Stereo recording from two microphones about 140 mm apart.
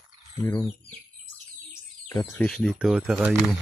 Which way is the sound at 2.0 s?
20° left (ahead or behind).